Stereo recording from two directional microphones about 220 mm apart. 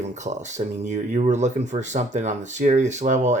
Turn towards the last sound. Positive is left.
turn(degrees=-30)  # may be behind; listen again after turning